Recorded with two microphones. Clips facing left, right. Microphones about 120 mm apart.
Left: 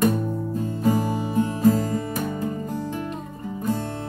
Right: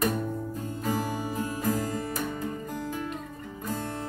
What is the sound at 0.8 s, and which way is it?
Music, 25° left (ahead or behind).